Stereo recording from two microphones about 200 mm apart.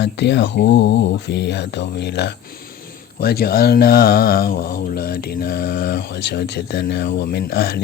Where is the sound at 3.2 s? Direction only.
50° left (ahead or behind).